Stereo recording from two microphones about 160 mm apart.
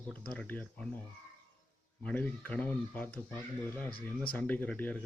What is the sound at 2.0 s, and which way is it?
Speech, 10° left (ahead or behind).